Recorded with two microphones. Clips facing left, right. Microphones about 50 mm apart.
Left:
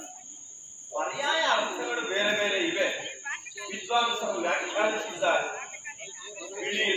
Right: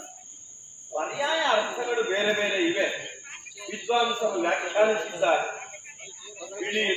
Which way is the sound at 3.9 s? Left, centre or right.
Centre.